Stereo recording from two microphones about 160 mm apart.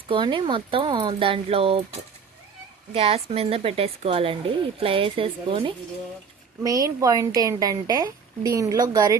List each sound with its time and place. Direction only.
0.1 s speech: 30° right (ahead or behind)
2.9 s speech: 40° right (ahead or behind)
6.6 s speech: 20° right (ahead or behind)